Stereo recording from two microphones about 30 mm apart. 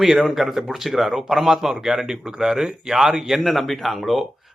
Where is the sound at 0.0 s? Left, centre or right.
Centre.